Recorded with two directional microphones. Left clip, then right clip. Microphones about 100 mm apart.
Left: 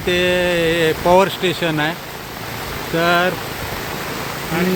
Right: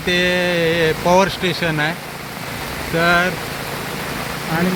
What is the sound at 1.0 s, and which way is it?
Speech, 20° left (ahead or behind).